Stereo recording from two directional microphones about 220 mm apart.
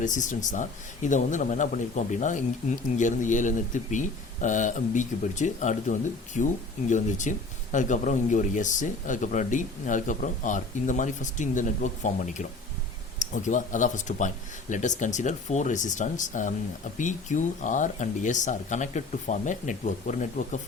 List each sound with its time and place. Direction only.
0.0 s speech: 35° left (ahead or behind)